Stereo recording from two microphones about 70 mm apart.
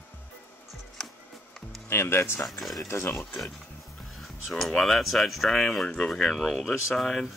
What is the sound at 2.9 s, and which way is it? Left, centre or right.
Speech, left.